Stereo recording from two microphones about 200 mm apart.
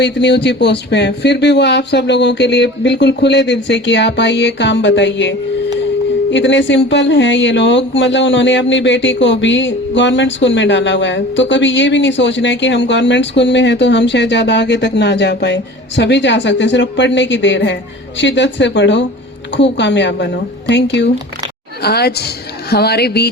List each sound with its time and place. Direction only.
0.0 s speech: 60° left (ahead or behind)
6.3 s a woman's voice: 65° left (ahead or behind)